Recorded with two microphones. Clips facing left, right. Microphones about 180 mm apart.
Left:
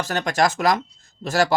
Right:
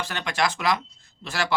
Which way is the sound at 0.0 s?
45° left (ahead or behind).